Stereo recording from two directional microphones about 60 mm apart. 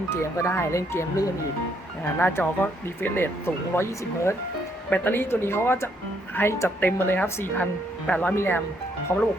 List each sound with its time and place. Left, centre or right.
0.1 s speech: left
2.1 s speech: left
4.9 s speech: left
6.7 s speech: left
8.4 s speech: left